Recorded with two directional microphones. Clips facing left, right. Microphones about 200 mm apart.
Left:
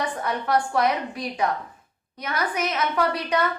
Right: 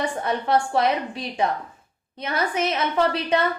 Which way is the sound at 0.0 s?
25° right (ahead or behind).